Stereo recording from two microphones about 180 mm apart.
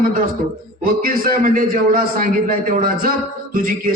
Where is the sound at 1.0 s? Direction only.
55° right (ahead or behind).